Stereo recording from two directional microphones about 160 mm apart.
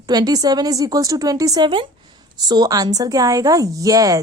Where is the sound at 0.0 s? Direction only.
25° right (ahead or behind).